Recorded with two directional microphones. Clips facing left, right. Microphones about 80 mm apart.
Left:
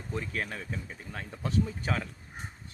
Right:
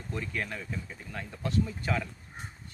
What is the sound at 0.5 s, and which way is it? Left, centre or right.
Speech, left.